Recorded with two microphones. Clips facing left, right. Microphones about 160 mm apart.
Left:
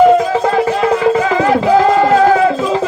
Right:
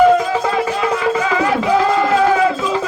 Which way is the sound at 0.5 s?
35° left (ahead or behind).